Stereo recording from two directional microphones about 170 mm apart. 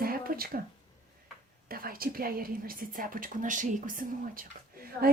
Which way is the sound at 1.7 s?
60° right (ahead or behind).